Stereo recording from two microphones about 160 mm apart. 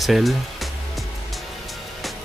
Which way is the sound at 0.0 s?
Centre (ahead or behind).